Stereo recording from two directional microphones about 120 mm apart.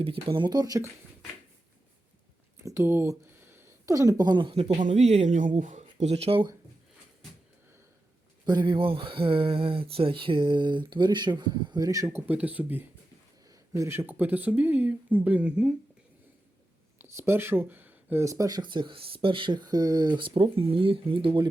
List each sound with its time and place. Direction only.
0.0 s speech: 50° right (ahead or behind); by 0.8 s 30° right (ahead or behind)
2.6 s speech: 25° right (ahead or behind); by 4.6 s 45° right (ahead or behind)
4.7 s speech: 85° right; by 6.5 s 50° right (ahead or behind)
8.4 s speech: 40° right (ahead or behind)
12.3 s speech: 10° right (ahead or behind)
13.5 s speech: 25° right (ahead or behind)
17.0 s speech: 20° right (ahead or behind); by 21.5 s 45° right (ahead or behind)